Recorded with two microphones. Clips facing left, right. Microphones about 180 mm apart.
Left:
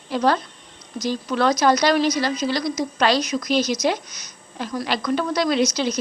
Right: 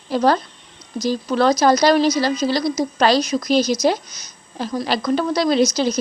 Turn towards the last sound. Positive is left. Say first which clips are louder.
# right 4 dB
turn(degrees=-35)  # may be behind; listen again after turning